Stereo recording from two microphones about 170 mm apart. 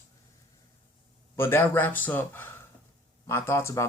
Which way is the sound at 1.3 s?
15° left (ahead or behind).